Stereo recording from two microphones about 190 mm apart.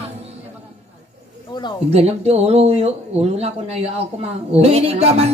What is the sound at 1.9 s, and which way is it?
A woman's voice, 35° right (ahead or behind).